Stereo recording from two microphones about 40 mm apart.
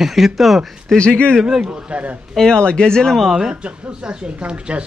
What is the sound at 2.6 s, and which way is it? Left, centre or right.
Speech, left.